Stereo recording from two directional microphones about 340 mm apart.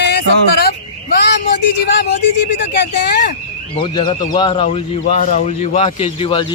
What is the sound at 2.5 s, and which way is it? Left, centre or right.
Speech, left.